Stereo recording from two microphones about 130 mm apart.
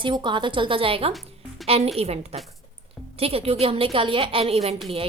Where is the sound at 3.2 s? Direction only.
50° right (ahead or behind).